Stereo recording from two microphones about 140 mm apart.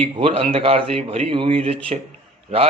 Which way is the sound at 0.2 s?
40° right (ahead or behind).